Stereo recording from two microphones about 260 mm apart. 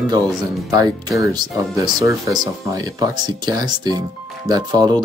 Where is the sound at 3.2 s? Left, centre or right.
Centre.